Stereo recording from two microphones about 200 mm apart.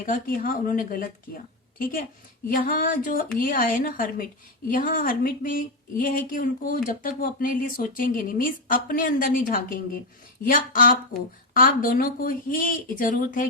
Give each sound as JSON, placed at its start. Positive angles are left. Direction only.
{"t": 0.0, "sound": "speech", "side_deg": 45}